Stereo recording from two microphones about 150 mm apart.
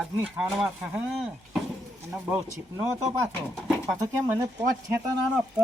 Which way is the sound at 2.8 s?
20° right (ahead or behind).